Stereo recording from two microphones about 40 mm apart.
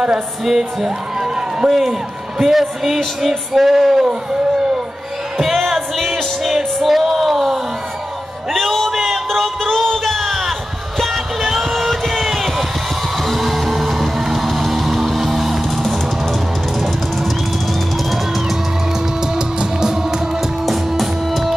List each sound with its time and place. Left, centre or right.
0.5 s speech: centre
1.7 s music: centre
5.4 s music: centre
8.9 s a sound: centre
13.2 s music: centre
19.3 s music: centre
20.6 s music: centre